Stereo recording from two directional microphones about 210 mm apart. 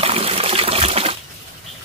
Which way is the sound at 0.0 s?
30° right (ahead or behind).